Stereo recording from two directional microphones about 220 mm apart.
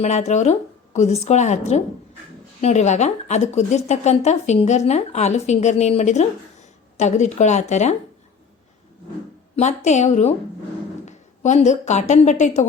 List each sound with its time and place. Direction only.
0.0 s a woman's voice: 30° left (ahead or behind)
9.6 s a woman's voice: 30° left (ahead or behind)